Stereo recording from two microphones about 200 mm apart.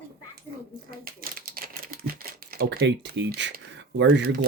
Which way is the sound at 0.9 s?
45° right (ahead or behind).